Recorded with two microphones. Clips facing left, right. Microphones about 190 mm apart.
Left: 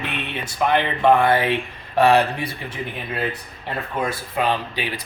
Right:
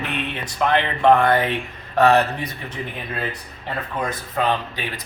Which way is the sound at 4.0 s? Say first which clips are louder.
Left 1 dB; 10° left (ahead or behind).